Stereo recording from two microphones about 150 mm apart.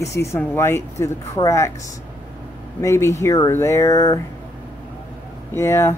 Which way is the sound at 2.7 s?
20° left (ahead or behind).